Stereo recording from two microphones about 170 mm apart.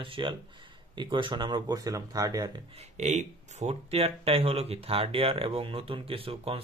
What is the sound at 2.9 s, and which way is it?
Speech, 45° right (ahead or behind).